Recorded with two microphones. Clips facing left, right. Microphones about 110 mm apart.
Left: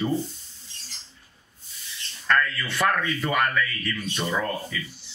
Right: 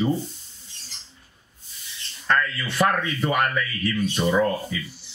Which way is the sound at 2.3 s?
25° right (ahead or behind).